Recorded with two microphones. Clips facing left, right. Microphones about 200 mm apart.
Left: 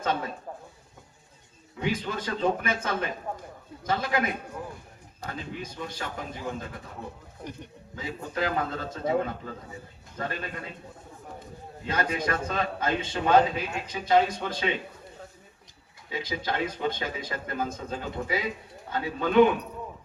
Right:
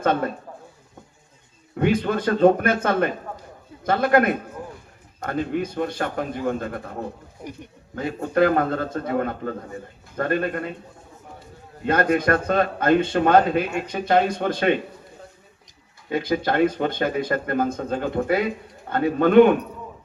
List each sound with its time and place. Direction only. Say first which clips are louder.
0.0 s speech: right 8 dB; 55° right (ahead or behind)
1.7 s speech: right 9 dB; 55° right (ahead or behind)
11.9 s speech: right 9 dB; 55° right (ahead or behind)
16.0 s speech: right 9 dB; 55° right (ahead or behind)